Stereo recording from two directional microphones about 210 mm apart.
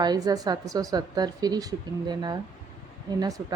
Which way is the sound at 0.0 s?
20° right (ahead or behind).